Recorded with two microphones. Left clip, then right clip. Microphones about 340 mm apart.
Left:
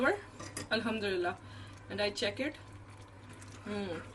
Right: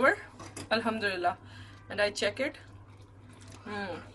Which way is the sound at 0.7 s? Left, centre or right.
Centre.